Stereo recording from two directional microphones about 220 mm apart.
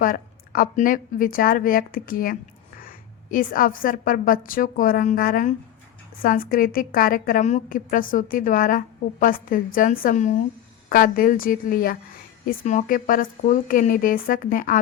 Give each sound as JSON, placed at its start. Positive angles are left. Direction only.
{"t": 0.0, "sound": "speech", "side_deg": 40}